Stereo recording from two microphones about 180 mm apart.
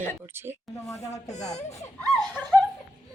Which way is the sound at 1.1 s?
40° left (ahead or behind).